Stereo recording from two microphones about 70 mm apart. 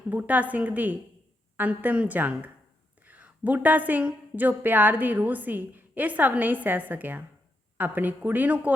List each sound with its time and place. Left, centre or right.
0.1 s a woman's voice: right